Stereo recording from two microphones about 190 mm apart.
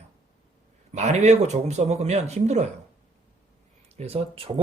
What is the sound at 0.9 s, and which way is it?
Speech, 35° right (ahead or behind).